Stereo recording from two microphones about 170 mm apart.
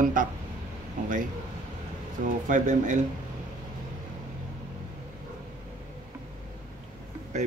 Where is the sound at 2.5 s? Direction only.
50° right (ahead or behind).